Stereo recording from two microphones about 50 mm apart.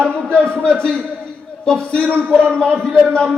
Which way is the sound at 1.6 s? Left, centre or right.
Centre.